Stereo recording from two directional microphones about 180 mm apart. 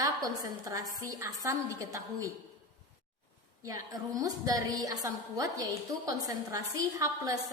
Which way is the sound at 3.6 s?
20° right (ahead or behind).